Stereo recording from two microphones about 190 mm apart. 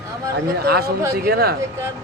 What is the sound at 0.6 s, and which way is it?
Speech, 55° right (ahead or behind).